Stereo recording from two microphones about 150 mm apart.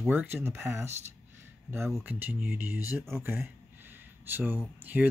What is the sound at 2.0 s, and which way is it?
Speech, 15° right (ahead or behind).